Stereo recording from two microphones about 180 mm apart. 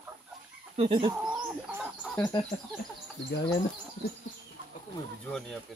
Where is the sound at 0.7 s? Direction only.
30° right (ahead or behind).